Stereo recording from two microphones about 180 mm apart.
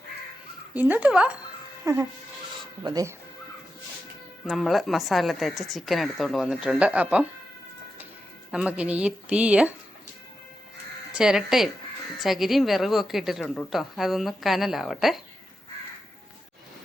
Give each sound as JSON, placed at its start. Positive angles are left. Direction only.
{"t": 0.7, "sound": "a woman's voice", "side_deg": -10}
{"t": 4.4, "sound": "a woman's voice", "side_deg": 0}
{"t": 8.5, "sound": "a woman's voice", "side_deg": -5}
{"t": 11.1, "sound": "a woman's voice", "side_deg": -5}